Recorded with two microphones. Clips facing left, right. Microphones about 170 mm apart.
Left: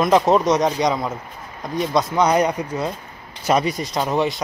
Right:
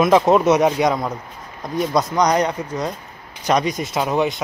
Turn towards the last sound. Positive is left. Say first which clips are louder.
# right 1 dB
turn(degrees=0)  # may be behind; listen again after turning